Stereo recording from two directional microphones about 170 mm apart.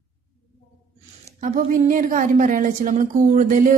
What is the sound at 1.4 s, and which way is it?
A woman's voice, 50° right (ahead or behind).